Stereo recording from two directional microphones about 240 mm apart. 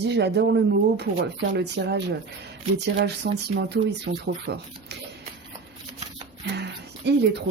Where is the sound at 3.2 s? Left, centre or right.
Right.